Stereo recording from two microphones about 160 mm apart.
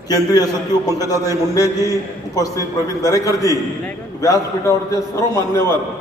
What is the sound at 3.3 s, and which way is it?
Speech, 20° right (ahead or behind).